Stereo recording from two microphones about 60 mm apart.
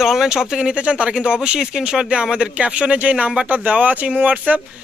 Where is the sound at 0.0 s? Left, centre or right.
Centre.